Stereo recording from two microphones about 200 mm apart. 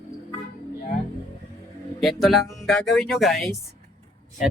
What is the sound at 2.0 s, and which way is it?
Speech, centre (ahead or behind).